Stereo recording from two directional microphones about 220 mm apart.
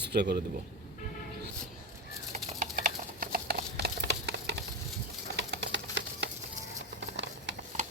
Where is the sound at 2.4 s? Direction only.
35° right (ahead or behind).